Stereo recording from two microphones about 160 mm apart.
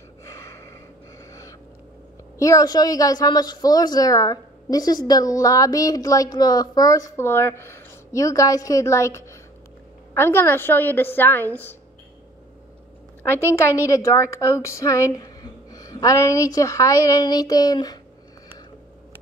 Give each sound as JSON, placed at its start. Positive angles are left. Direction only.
{"t": 0.2, "sound": "gasp", "side_deg": 15}
{"t": 2.3, "sound": "a woman's voice", "side_deg": 20}
{"t": 13.2, "sound": "a woman's voice", "side_deg": 15}